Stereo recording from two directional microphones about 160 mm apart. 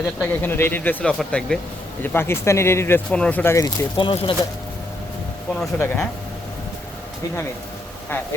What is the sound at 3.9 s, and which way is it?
Speech, 30° left (ahead or behind).